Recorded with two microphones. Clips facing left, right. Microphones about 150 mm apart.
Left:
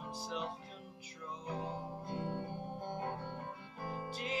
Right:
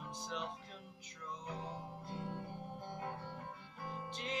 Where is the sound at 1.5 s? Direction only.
25° left (ahead or behind).